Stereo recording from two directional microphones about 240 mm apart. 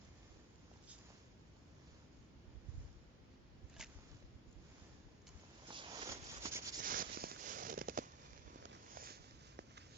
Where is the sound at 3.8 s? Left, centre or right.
Centre.